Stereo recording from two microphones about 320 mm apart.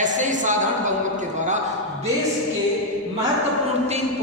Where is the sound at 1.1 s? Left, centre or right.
Right.